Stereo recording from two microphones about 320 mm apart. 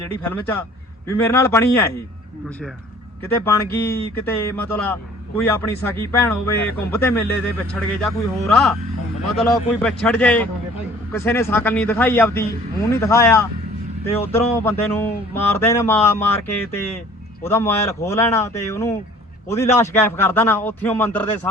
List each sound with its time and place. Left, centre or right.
0.2 s a man's voice: centre
3.4 s a man's voice: centre
17.4 s speech: centre